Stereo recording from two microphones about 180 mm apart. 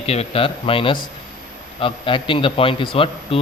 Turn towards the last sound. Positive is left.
turn(degrees=30)  # may be behind; listen again after turning